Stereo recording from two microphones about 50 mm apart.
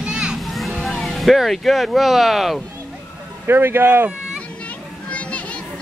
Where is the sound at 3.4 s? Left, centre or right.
Right.